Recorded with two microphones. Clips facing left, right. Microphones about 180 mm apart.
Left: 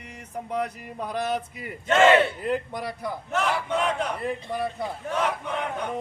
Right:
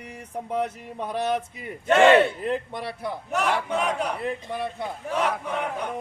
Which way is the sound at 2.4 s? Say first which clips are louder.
Even; centre (ahead or behind).